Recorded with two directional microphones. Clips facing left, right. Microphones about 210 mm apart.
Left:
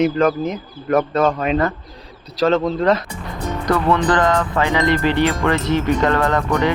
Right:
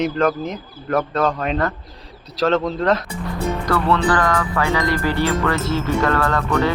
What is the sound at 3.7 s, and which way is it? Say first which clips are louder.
Speech: left 3 dB; 20° left (ahead or behind).